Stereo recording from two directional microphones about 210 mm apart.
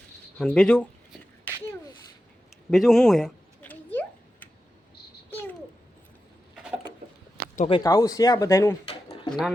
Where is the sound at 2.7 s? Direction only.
Centre (ahead or behind).